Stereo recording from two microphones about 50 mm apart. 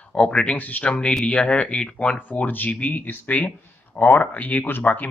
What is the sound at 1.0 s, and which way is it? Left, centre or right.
Speech, centre.